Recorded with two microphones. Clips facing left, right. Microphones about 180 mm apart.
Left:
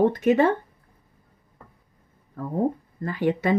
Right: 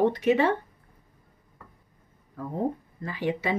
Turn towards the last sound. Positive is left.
turn(degrees=50)  # may be behind; listen again after turning